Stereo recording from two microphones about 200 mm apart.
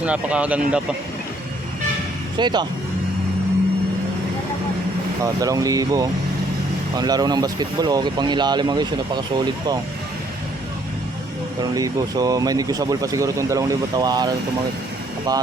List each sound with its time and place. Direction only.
0.0 s speech: 5° right (ahead or behind)
2.4 s speech: 20° right (ahead or behind)
5.2 s speech: 15° right (ahead or behind)
11.6 s speech: 15° right (ahead or behind)